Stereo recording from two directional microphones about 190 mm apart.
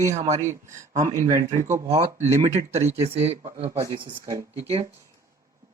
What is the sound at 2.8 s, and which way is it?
Speech, 15° right (ahead or behind).